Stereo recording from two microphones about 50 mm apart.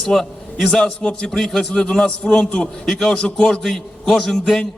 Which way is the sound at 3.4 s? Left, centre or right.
Centre.